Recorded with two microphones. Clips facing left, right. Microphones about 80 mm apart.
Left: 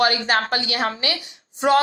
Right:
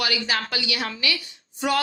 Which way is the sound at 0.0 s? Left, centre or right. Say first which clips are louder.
Left 7 dB; left.